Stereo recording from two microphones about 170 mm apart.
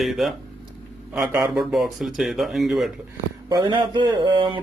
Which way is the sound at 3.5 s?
25° right (ahead or behind).